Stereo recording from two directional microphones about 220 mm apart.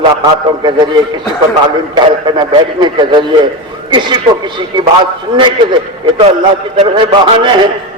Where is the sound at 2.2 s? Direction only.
20° right (ahead or behind).